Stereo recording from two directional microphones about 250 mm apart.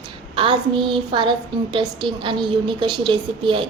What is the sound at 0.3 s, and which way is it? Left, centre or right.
A woman's voice, right.